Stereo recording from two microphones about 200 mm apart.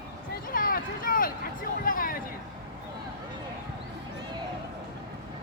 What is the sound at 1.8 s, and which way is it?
Speech, 45° left (ahead or behind).